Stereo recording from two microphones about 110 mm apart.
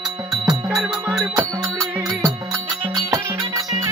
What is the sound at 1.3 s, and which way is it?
Music, 30° right (ahead or behind).